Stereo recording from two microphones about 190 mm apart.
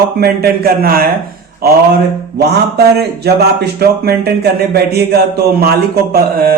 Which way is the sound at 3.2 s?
55° right (ahead or behind).